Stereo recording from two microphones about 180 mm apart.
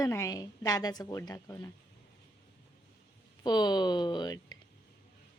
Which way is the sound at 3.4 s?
25° left (ahead or behind).